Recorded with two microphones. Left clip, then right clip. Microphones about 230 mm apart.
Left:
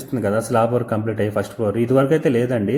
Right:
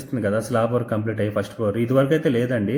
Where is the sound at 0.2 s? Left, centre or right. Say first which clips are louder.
Left 3 dB; centre.